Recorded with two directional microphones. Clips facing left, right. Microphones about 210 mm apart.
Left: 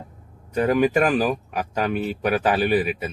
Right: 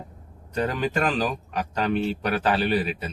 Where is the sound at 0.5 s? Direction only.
10° left (ahead or behind).